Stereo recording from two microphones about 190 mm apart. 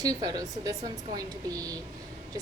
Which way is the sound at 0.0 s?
20° right (ahead or behind).